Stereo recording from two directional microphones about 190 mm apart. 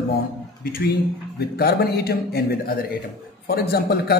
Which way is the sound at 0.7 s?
50° left (ahead or behind).